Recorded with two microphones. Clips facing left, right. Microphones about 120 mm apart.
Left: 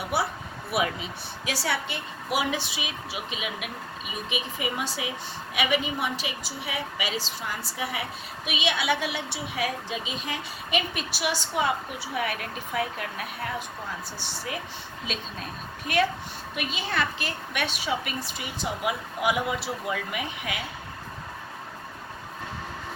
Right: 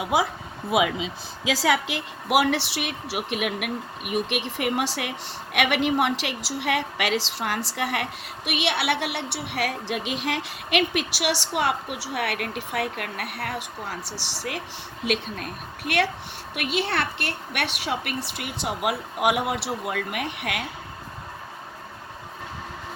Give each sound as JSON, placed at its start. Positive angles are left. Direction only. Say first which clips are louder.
{"t": 0.0, "sound": "speech", "louder": "right 4 dB", "side_deg": -90}
{"t": 1.6, "sound": "a woman's voice", "louder": "right 7 dB", "side_deg": -90}
{"t": 8.4, "sound": "a woman's voice", "louder": "right 2 dB", "side_deg": -70}